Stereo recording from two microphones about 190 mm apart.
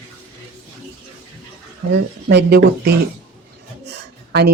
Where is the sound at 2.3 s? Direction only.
60° right (ahead or behind).